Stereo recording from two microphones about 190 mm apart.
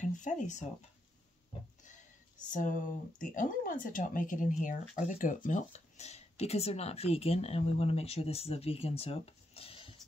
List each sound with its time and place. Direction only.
0.2 s speech: 40° left (ahead or behind)
2.5 s speech: 40° left (ahead or behind)